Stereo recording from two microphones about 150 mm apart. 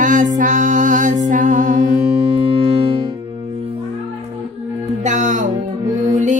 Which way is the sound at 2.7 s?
40° right (ahead or behind).